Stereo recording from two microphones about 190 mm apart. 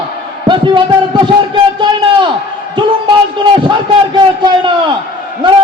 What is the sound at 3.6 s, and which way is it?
A man's voice, 25° right (ahead or behind).